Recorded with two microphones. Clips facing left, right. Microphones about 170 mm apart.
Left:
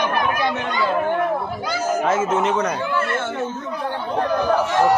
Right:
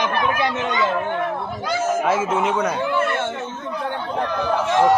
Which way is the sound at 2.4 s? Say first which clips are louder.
Even; 5° right (ahead or behind).